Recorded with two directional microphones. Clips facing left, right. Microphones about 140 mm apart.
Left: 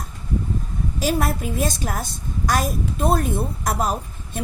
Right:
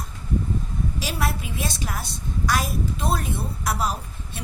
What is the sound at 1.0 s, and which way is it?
A woman's voice, 45° left (ahead or behind).